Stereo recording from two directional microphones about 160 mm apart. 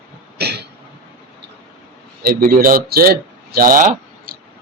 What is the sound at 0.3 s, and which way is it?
Throat clearing, 90° right.